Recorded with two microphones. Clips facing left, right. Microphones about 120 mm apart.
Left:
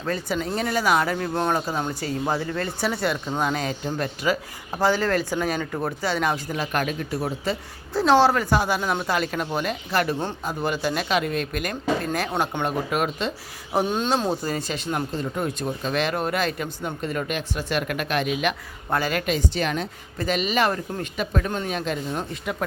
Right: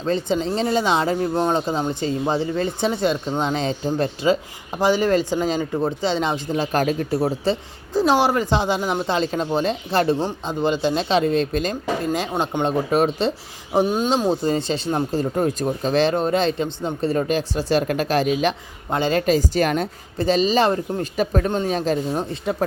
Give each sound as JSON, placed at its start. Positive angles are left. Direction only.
{"t": 0.0, "sound": "speech", "side_deg": -25}
{"t": 4.7, "sound": "speech", "side_deg": -15}
{"t": 7.9, "sound": "speech", "side_deg": -15}
{"t": 13.8, "sound": "speech", "side_deg": -10}
{"t": 15.2, "sound": "speech", "side_deg": -40}
{"t": 20.1, "sound": "speech", "side_deg": -30}